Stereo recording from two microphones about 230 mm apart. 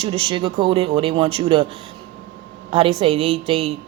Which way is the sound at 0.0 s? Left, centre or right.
Right.